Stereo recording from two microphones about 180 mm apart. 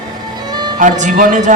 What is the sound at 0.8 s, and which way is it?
Speech, 40° right (ahead or behind).